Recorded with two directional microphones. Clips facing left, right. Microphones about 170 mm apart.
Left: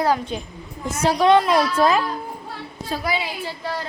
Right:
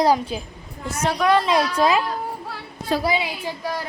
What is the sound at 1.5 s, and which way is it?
Speech, 5° left (ahead or behind).